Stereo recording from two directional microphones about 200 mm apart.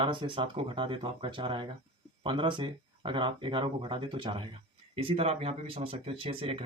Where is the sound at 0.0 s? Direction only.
25° right (ahead or behind).